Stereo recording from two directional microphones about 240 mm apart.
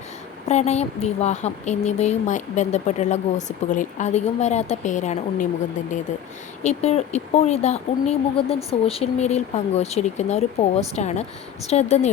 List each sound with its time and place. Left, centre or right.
0.4 s speech: left
6.6 s speech: left